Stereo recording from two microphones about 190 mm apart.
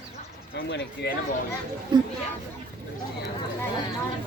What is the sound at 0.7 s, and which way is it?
Speech, 60° left (ahead or behind).